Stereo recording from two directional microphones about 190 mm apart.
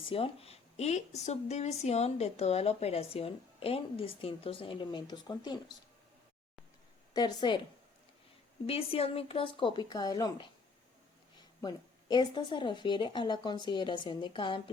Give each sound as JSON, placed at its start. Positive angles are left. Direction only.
{"t": 0.0, "sound": "a woman's voice", "side_deg": 30}
{"t": 7.1, "sound": "a woman's voice", "side_deg": 20}
{"t": 8.6, "sound": "a woman's voice", "side_deg": 30}